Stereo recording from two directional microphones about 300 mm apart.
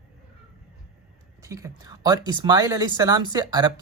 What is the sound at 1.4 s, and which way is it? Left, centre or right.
Speech, centre.